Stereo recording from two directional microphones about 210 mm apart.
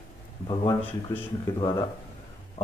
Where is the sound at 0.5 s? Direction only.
15° left (ahead or behind).